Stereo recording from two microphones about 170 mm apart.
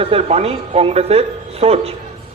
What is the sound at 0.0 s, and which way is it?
A man's voice, 35° right (ahead or behind).